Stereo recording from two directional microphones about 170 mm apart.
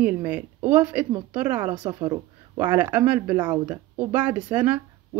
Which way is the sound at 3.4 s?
25° right (ahead or behind).